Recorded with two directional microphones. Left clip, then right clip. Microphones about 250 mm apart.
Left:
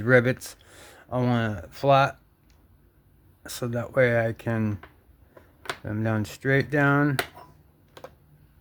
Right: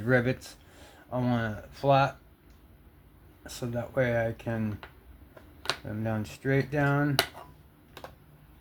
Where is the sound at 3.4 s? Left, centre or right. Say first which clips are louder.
Left 4 dB; left.